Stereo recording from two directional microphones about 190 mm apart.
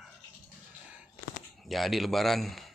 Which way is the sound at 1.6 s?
Centre (ahead or behind).